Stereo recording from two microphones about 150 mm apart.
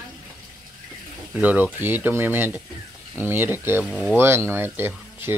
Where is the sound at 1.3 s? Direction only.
10° right (ahead or behind).